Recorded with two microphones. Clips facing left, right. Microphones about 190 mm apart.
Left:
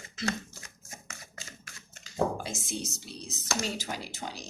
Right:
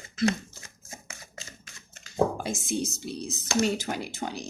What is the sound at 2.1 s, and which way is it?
Speech, 55° right (ahead or behind).